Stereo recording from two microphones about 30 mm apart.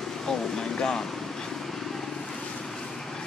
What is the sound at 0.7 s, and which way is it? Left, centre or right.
Speech, centre.